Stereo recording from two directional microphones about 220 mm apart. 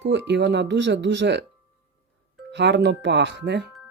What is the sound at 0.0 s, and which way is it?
Speech, 50° right (ahead or behind).